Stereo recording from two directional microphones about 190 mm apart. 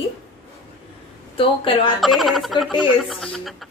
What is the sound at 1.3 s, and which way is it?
Speech, 30° left (ahead or behind).